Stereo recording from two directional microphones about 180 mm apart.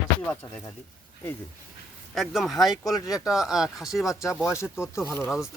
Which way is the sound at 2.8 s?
20° left (ahead or behind).